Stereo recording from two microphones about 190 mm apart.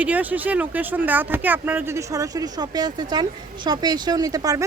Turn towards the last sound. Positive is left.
turn(degrees=-20)  # may be behind; listen again after turning